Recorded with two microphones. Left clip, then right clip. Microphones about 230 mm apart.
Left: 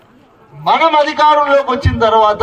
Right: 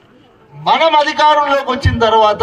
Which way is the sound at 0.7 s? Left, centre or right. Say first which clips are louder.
Even; right.